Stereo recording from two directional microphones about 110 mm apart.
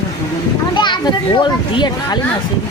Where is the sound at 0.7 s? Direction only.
45° left (ahead or behind).